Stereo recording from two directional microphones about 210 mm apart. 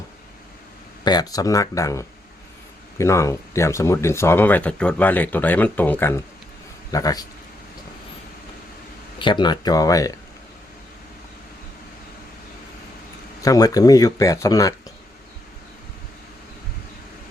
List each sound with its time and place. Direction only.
1.0 s speech: 20° left (ahead or behind)
9.1 s speech: 20° left (ahead or behind)
13.4 s speech: 15° left (ahead or behind)